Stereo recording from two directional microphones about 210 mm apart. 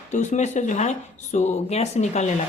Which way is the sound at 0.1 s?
35° left (ahead or behind).